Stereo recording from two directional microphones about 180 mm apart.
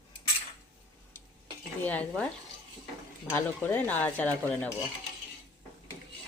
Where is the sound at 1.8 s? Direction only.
10° left (ahead or behind).